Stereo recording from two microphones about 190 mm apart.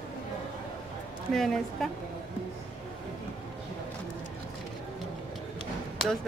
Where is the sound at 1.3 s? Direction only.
Centre (ahead or behind).